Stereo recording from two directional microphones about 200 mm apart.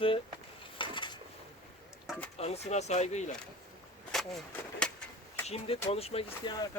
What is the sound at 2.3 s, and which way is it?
Speech, 30° left (ahead or behind).